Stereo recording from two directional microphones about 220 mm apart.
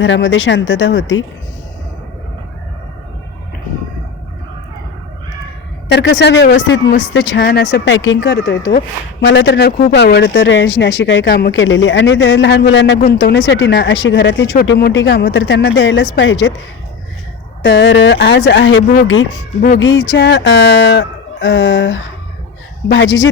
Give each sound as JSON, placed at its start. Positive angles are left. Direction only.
{"t": 0.0, "sound": "speech", "side_deg": 55}
{"t": 5.9, "sound": "speech", "side_deg": 50}
{"t": 17.6, "sound": "speech", "side_deg": 50}